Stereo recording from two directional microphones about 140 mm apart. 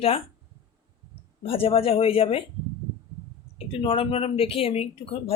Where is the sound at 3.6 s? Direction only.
40° left (ahead or behind).